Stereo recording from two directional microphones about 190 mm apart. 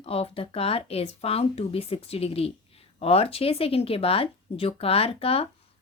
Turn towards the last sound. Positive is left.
turn(degrees=30)  # may be behind; listen again after turning